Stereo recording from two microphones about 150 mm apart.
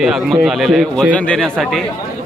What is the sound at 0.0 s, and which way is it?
Speech, centre (ahead or behind).